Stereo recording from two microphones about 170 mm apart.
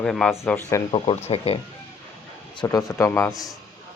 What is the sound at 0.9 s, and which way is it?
Speech, 35° left (ahead or behind).